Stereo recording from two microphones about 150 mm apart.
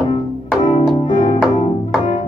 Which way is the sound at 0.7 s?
30° left (ahead or behind).